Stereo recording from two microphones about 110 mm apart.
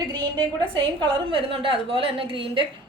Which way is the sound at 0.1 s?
45° right (ahead or behind).